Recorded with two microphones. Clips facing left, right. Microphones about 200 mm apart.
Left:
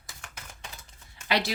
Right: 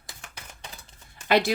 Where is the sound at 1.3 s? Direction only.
50° right (ahead or behind).